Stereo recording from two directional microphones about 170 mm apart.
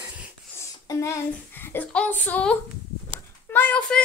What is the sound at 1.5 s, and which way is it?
A woman's voice, 10° left (ahead or behind).